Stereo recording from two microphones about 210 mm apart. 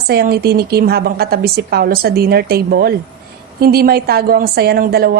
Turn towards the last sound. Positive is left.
turn(degrees=-45)  # may be behind; listen again after turning